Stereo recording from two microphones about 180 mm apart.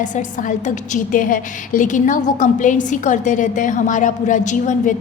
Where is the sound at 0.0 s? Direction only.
45° left (ahead or behind).